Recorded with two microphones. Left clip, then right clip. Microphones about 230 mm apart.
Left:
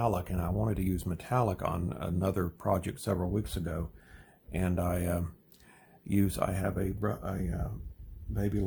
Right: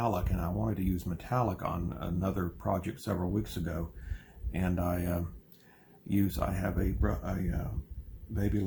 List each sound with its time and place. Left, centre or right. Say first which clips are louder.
0.0 s speech: left 1 dB; left